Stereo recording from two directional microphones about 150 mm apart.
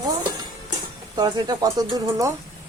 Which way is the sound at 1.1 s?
30° right (ahead or behind).